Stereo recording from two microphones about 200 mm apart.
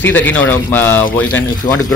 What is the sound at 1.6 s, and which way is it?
Speech, 40° left (ahead or behind).